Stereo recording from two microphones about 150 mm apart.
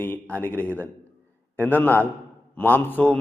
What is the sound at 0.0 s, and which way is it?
A man's voice, 10° left (ahead or behind).